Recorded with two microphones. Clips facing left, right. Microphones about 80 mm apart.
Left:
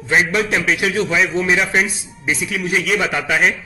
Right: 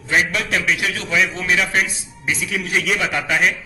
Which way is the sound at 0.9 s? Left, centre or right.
Left.